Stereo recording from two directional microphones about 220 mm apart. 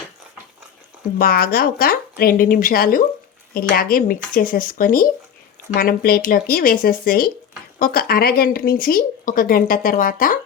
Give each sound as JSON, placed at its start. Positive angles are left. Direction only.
{"t": 1.2, "sound": "speech", "side_deg": 45}